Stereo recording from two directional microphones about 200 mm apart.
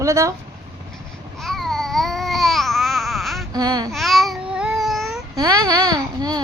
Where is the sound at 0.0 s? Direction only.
15° right (ahead or behind).